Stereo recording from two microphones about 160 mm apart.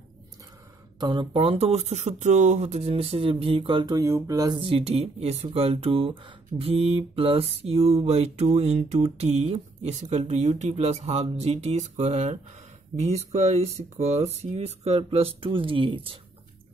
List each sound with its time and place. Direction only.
0.9 s speech: 25° right (ahead or behind)